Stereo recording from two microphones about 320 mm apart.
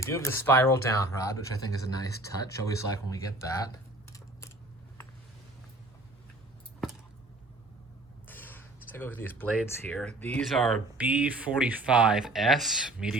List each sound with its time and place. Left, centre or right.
0.0 s speech: centre
8.3 s speech: centre